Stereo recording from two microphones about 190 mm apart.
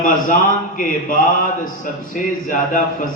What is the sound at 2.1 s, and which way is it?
Speech, 45° left (ahead or behind).